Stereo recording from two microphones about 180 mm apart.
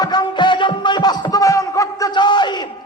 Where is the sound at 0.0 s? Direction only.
25° left (ahead or behind).